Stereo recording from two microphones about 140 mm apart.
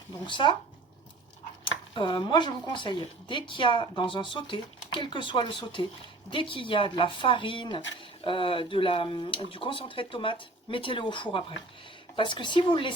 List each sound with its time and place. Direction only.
0.3 s speech: 35° left (ahead or behind)
1.6 s speech: 35° left (ahead or behind)